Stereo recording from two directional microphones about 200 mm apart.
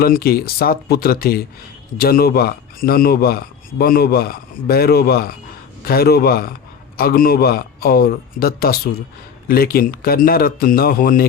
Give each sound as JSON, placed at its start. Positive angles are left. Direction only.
{"t": 0.0, "sound": "speech", "side_deg": 50}